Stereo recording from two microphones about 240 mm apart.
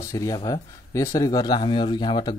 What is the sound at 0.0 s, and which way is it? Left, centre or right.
Speech, centre.